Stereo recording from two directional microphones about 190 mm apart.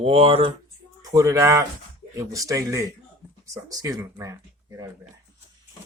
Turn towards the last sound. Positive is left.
turn(degrees=-15)  # may be behind; listen again after turning